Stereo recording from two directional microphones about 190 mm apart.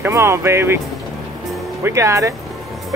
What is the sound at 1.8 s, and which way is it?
Speech, 15° right (ahead or behind).